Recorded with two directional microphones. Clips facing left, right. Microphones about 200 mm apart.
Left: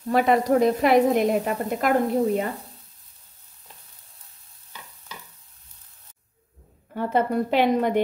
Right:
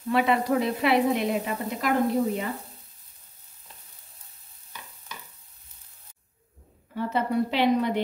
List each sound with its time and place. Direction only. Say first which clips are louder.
0.1 s a woman's voice: left 4 dB; 40° left (ahead or behind)
6.9 s a woman's voice: left 4 dB; 50° left (ahead or behind)